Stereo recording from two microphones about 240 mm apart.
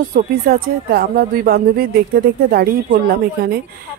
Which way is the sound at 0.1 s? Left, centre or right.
Right.